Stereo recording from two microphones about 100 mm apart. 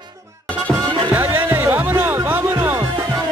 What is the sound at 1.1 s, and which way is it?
Music, 25° right (ahead or behind).